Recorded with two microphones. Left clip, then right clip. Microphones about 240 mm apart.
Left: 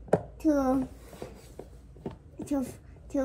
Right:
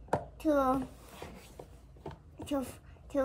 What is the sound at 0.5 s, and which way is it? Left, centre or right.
Speech, right.